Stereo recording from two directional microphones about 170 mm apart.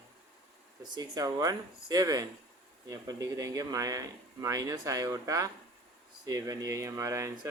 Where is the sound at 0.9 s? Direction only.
20° right (ahead or behind).